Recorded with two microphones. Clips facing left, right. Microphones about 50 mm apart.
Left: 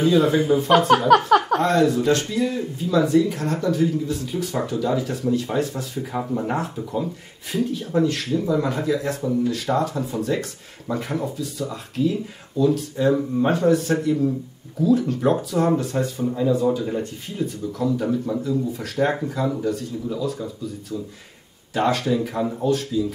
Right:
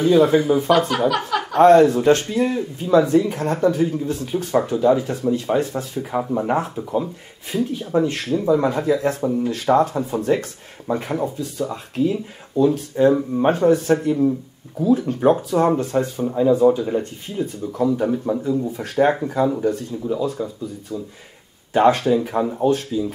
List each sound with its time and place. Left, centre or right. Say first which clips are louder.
0.0 s speech: right 3 dB; right
0.7 s speech: left 3 dB; left
1.6 s speech: right 7 dB; right
6.1 s speech: right 4 dB; centre
8.0 s speech: left 1 dB; right